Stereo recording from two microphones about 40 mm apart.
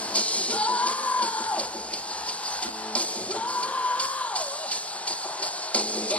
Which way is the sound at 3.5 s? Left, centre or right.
Left.